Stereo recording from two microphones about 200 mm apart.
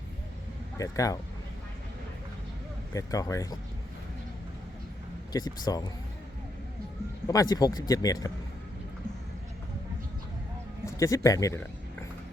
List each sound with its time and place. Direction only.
0.8 s speech: 15° left (ahead or behind)
2.9 s speech: 15° left (ahead or behind)
5.3 s speech: 20° left (ahead or behind)
7.3 s speech: 15° left (ahead or behind)
10.8 s speech: 15° left (ahead or behind)